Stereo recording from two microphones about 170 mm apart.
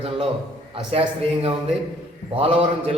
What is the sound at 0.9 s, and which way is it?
A man's voice, 35° right (ahead or behind).